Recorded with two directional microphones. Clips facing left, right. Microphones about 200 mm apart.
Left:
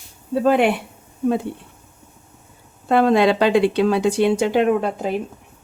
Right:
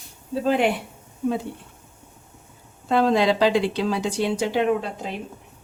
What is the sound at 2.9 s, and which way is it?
A woman's voice, 60° left (ahead or behind).